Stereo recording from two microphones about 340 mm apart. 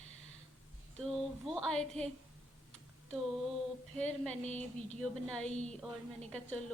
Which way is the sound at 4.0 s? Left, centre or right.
Centre.